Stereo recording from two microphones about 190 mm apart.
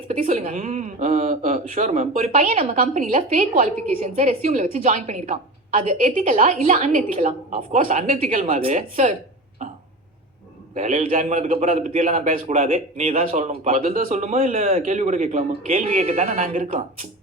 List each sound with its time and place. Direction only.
0.1 s speech: 40° right (ahead or behind)
9.6 s throat clearing: 40° right (ahead or behind)
10.8 s speech: 40° right (ahead or behind)